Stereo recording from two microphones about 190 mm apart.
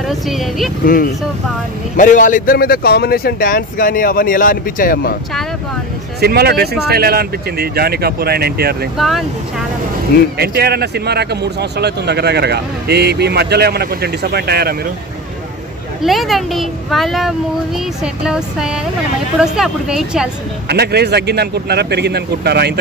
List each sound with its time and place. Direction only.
0.1 s speech: centre (ahead or behind)
2.0 s speech: 45° left (ahead or behind)
6.2 s speech: 55° right (ahead or behind)
8.9 s speech: centre (ahead or behind)
10.3 s speech: 55° right (ahead or behind)
16.0 s speech: centre (ahead or behind)
20.6 s speech: 60° right (ahead or behind)